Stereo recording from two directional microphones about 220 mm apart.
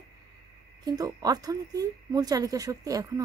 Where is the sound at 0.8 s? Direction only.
15° right (ahead or behind).